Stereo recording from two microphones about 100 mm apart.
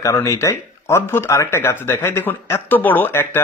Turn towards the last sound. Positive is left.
turn(degrees=20)  # may be behind; listen again after turning